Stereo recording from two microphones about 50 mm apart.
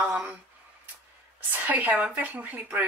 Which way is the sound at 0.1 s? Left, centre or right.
Centre.